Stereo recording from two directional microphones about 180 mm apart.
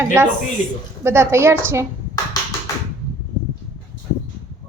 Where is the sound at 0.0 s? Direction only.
15° right (ahead or behind).